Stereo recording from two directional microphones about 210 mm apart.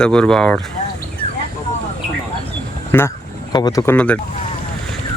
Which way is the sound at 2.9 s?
10° left (ahead or behind).